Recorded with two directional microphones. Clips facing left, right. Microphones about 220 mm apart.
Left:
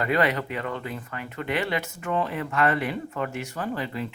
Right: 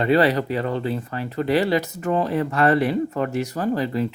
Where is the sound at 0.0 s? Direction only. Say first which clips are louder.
Right 6 dB; 30° right (ahead or behind).